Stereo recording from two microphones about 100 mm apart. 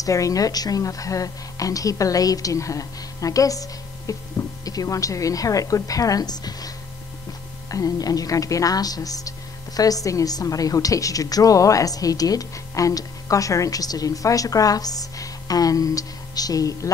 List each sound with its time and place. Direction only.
0.0 s a woman's voice: 35° left (ahead or behind)
7.7 s a woman's voice: 35° left (ahead or behind)